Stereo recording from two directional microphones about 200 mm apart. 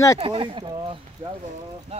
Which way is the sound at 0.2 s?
25° right (ahead or behind).